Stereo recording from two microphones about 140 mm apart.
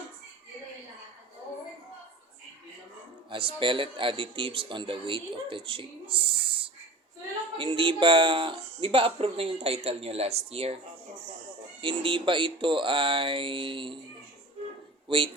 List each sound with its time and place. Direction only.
3.2 s speech: 40° right (ahead or behind)
11.8 s speech: 35° right (ahead or behind)
15.0 s speech: 40° right (ahead or behind)